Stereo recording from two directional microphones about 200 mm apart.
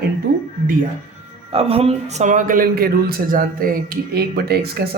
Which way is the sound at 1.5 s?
30° right (ahead or behind).